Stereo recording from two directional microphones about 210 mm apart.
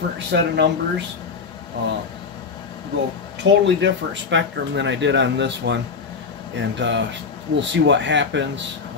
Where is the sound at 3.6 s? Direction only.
60° right (ahead or behind).